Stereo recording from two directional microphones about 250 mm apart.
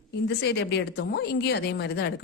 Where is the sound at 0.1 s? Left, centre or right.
Left.